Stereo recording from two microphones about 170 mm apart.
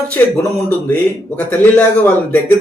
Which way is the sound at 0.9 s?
10° left (ahead or behind).